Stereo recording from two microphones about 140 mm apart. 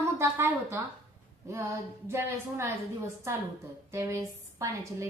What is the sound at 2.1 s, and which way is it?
Speech, 20° right (ahead or behind).